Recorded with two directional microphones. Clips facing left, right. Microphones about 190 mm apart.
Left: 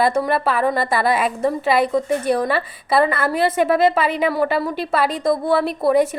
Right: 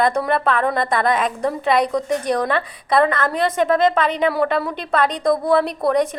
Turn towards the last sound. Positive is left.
turn(degrees=5)  # may be behind; listen again after turning